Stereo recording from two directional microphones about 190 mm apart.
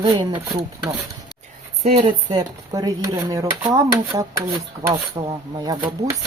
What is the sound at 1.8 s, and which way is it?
Speech, 35° right (ahead or behind).